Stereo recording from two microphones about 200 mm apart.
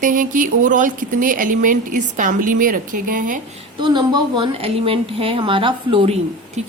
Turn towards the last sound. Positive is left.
turn(degrees=-25)  # may be behind; listen again after turning